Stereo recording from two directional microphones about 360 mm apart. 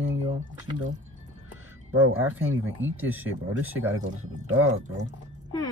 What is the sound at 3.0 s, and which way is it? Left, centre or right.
Speech, centre.